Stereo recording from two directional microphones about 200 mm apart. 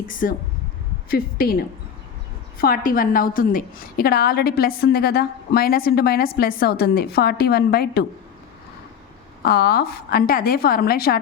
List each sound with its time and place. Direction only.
0.1 s a woman's voice: 40° left (ahead or behind)
2.6 s a woman's voice: 45° left (ahead or behind)
9.4 s a woman's voice: 50° left (ahead or behind)